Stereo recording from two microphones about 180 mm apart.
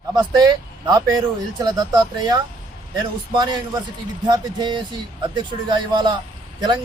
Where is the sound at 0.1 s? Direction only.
20° right (ahead or behind).